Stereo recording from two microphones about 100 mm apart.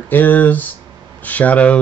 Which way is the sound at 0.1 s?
20° left (ahead or behind).